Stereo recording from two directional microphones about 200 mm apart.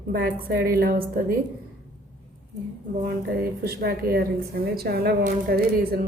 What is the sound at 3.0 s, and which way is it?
A woman's voice, 50° right (ahead or behind).